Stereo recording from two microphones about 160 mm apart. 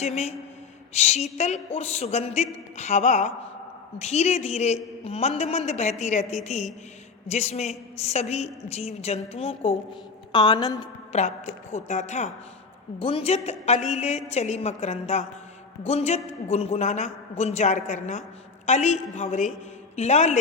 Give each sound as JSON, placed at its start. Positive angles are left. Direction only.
{"t": 0.0, "sound": "a man's voice", "side_deg": 40}
{"t": 11.7, "sound": "a man's voice", "side_deg": 50}